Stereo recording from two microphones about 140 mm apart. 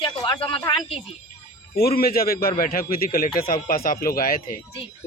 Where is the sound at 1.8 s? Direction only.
90° left.